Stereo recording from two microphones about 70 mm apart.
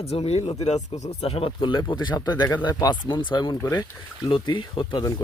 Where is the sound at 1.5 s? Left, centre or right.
Left.